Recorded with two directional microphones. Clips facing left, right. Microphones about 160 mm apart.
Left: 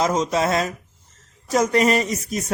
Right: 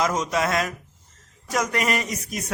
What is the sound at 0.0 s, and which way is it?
Speech, 25° left (ahead or behind).